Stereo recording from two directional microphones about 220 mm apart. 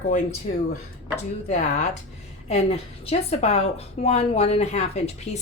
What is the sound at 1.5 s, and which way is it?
A woman's voice, 30° left (ahead or behind).